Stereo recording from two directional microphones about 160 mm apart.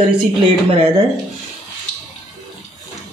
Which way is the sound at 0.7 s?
35° right (ahead or behind).